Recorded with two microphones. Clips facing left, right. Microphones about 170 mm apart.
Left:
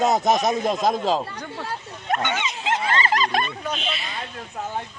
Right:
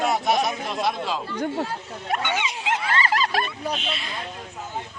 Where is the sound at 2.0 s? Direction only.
10° right (ahead or behind).